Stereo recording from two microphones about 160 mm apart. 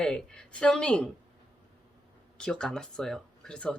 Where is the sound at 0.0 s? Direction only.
5° left (ahead or behind).